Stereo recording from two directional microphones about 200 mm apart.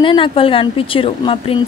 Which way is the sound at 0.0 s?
25° left (ahead or behind).